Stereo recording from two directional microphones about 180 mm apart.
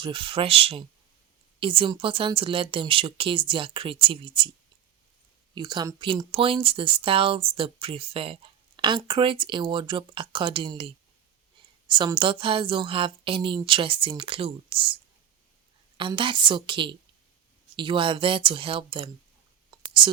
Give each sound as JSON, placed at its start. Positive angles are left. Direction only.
{"t": 0.0, "sound": "speech", "side_deg": -30}
{"t": 5.5, "sound": "speech", "side_deg": -25}
{"t": 16.0, "sound": "speech", "side_deg": -25}
{"t": 19.7, "sound": "whispering", "side_deg": -25}